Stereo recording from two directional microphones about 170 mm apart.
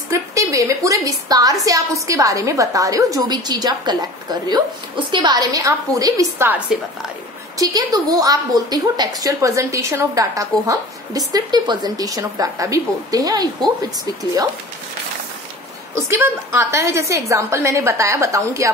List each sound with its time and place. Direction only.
0.1 s a woman's voice: 20° right (ahead or behind)
7.5 s a woman's voice: 20° right (ahead or behind)
15.9 s a woman's voice: 15° right (ahead or behind)